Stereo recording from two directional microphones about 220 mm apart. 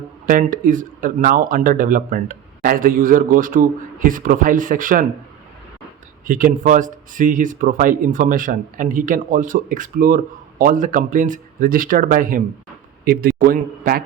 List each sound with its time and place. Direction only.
0.3 s speech: 40° right (ahead or behind)
6.2 s speech: 40° right (ahead or behind)